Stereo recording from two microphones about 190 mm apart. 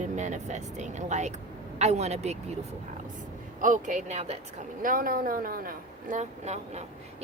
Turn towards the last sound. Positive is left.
turn(degrees=-40)  # may be behind; listen again after turning